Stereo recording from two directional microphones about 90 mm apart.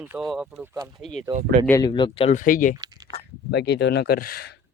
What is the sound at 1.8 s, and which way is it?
Speech, 55° left (ahead or behind).